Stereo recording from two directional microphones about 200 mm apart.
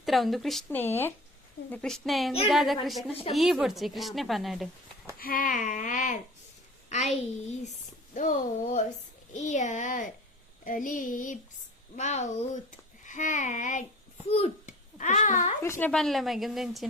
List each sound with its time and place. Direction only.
0.0 s a woman's voice: centre (ahead or behind)
5.2 s a sound: 45° left (ahead or behind)
14.3 s a child's voice: 30° left (ahead or behind)
15.6 s a woman's voice: 10° left (ahead or behind)